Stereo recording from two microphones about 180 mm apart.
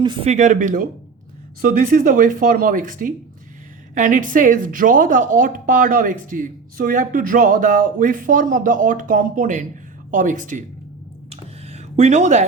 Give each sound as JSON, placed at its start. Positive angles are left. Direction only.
{"t": 0.0, "sound": "speech", "side_deg": -25}
{"t": 0.3, "sound": "a woman's voice", "side_deg": -40}
{"t": 11.3, "sound": "a sound", "side_deg": -35}